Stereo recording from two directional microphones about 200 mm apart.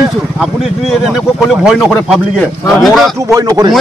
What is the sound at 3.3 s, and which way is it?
Speech, 15° right (ahead or behind).